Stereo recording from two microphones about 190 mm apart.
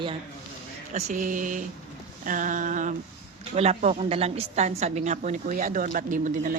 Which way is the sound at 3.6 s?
35° right (ahead or behind).